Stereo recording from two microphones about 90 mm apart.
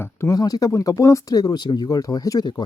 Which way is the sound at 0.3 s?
45° left (ahead or behind).